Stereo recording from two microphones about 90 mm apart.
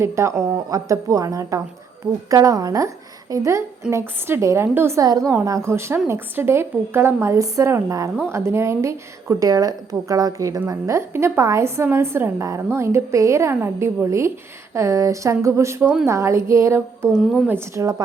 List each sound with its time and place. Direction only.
0.0 s a woman's voice: 30° right (ahead or behind)
5.0 s a woman's voice: 45° right (ahead or behind)
5.5 s a woman's voice: 35° right (ahead or behind)
9.3 s a woman's voice: 40° right (ahead or behind)
17.1 s a woman's voice: 10° right (ahead or behind)
17.7 s a woman's voice: 35° right (ahead or behind)